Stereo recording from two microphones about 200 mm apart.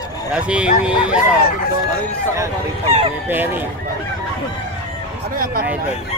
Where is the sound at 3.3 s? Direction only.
10° right (ahead or behind).